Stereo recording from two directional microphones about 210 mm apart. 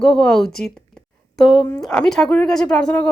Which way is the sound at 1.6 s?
20° left (ahead or behind).